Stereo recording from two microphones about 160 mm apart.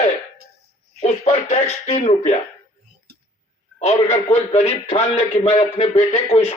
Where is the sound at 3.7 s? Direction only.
45° left (ahead or behind).